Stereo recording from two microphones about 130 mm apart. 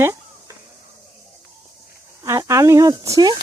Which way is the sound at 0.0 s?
25° right (ahead or behind).